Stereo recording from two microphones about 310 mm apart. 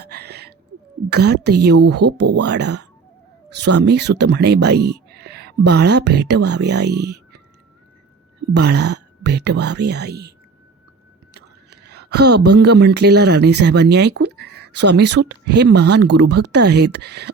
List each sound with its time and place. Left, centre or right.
0.0 s a sound: right
1.1 s speech: right
8.5 s speech: right
11.3 s speech: right